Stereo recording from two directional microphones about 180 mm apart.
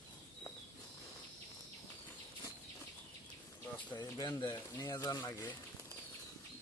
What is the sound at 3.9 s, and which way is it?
Speech, 20° left (ahead or behind).